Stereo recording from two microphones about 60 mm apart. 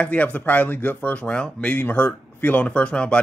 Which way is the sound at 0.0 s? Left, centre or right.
Left.